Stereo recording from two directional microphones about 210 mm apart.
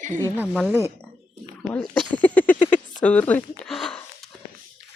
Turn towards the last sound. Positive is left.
turn(degrees=5)  # may be behind; listen again after turning